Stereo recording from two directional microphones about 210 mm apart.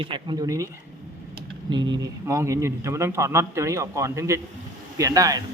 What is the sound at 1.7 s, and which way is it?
A man's voice, 20° right (ahead or behind).